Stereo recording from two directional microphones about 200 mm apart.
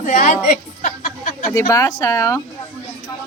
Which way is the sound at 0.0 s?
40° left (ahead or behind).